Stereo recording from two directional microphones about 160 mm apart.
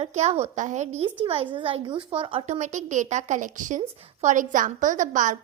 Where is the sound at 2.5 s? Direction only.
50° right (ahead or behind).